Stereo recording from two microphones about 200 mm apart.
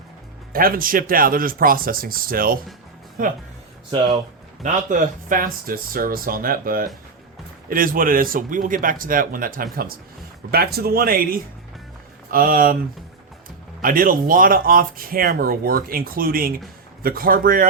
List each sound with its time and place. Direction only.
0.5 s speech: 45° right (ahead or behind)
4.6 s speech: 40° right (ahead or behind)
13.8 s speech: 45° right (ahead or behind)